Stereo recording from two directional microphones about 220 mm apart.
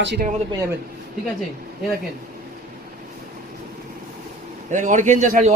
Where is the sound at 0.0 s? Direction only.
50° right (ahead or behind).